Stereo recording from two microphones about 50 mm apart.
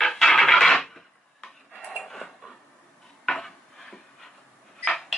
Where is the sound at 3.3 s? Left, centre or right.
Centre.